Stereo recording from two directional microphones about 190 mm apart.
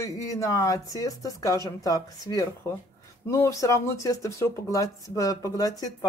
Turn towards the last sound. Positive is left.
turn(degrees=20)  # may be behind; listen again after turning